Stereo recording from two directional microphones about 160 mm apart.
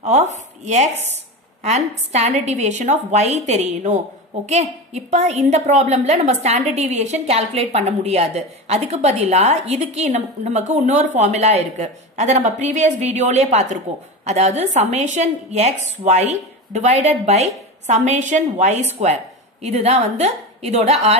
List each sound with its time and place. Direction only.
0.0 s a woman's voice: 45° right (ahead or behind)